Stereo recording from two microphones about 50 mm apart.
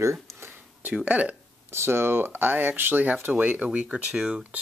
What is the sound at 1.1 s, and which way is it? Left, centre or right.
Speech, right.